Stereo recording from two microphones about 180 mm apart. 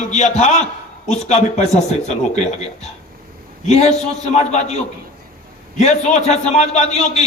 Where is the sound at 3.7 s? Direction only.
35° left (ahead or behind).